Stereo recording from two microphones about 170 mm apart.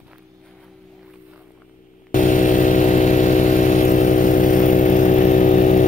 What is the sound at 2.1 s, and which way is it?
Motorcycle, 50° left (ahead or behind).